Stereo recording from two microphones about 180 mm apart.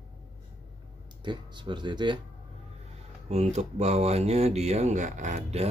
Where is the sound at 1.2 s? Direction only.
25° right (ahead or behind).